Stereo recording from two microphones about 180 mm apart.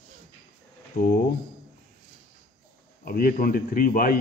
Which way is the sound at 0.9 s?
55° left (ahead or behind).